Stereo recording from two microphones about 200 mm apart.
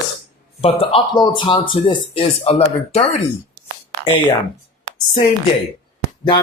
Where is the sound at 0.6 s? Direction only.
30° left (ahead or behind).